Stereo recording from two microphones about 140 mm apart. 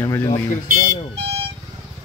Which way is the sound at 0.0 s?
20° left (ahead or behind).